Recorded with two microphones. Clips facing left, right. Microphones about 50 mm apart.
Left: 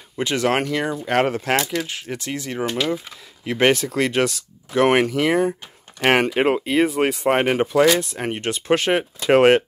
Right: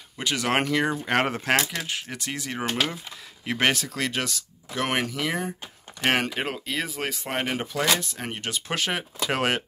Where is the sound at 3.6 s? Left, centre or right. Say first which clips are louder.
Left 7 dB; centre; by 5.3 s left.